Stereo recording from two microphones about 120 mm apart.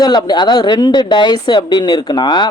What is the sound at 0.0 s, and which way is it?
Speech, 35° left (ahead or behind).